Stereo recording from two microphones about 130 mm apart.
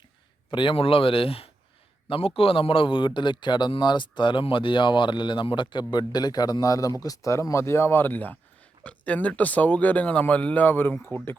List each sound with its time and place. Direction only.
0.5 s a man's voice: 40° left (ahead or behind); by 11.3 s 15° left (ahead or behind)